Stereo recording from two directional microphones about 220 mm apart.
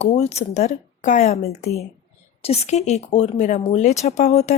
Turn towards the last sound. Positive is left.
turn(degrees=30)  # may be behind; listen again after turning